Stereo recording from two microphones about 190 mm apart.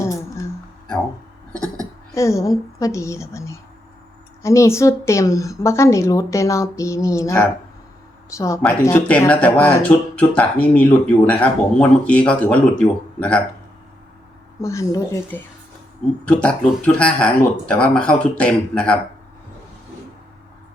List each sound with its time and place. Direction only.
0.0 s a sound: 15° left (ahead or behind)
2.1 s speech: 15° left (ahead or behind)
14.6 s speech: 15° left (ahead or behind)